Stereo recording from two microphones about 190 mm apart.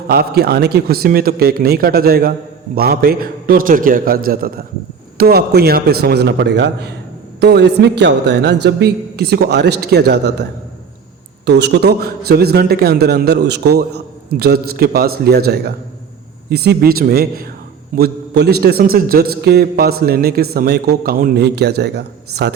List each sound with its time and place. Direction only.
0.1 s a man's voice: 55° right (ahead or behind)
11.4 s a man's voice: 60° right (ahead or behind)